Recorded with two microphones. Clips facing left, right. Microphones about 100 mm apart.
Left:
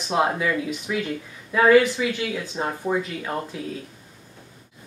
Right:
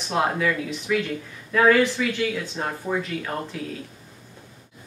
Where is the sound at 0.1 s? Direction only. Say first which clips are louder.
Left 1 dB; 15° left (ahead or behind).